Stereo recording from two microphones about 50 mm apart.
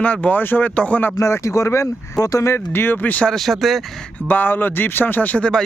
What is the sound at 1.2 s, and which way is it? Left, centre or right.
Speech, left.